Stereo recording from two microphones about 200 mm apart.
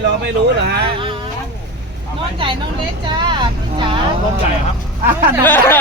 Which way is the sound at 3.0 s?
20° right (ahead or behind).